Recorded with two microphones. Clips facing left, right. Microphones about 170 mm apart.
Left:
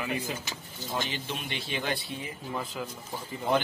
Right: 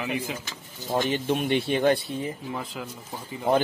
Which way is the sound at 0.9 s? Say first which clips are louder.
Right 9 dB; 45° right (ahead or behind).